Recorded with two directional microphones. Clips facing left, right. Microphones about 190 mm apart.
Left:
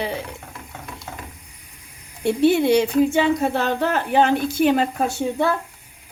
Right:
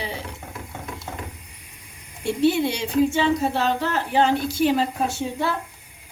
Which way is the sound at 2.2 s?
55° left (ahead or behind).